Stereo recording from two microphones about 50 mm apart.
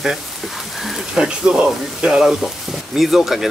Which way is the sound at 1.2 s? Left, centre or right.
Centre.